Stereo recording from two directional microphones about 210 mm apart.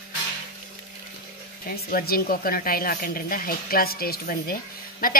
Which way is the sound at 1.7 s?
45° left (ahead or behind).